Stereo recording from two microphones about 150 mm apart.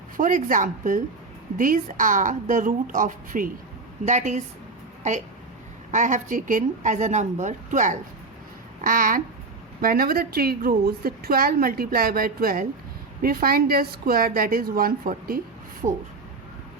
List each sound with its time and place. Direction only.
0.2 s a woman's voice: 60° right (ahead or behind)
4.0 s a woman's voice: 50° right (ahead or behind)
5.9 s a woman's voice: 55° right (ahead or behind)
9.8 s a woman's voice: 80° right
15.8 s a woman's voice: 45° right (ahead or behind)